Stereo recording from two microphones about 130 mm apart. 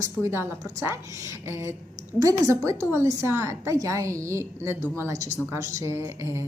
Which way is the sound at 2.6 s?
20° right (ahead or behind).